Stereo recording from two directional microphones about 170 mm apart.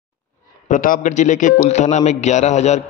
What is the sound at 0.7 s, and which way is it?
A man's voice, 50° left (ahead or behind).